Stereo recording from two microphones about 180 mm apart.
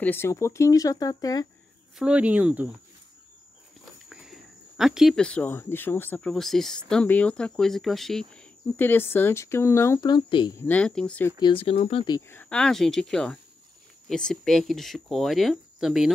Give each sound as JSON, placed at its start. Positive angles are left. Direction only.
{"t": 0.0, "sound": "speech", "side_deg": 10}
{"t": 2.0, "sound": "speech", "side_deg": -5}
{"t": 4.1, "sound": "speech", "side_deg": -5}
{"t": 10.6, "sound": "speech", "side_deg": 10}
{"t": 11.3, "sound": "speech", "side_deg": 30}
{"t": 12.2, "sound": "speech", "side_deg": 10}